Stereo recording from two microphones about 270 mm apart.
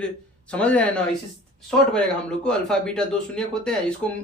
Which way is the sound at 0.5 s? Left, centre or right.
Centre.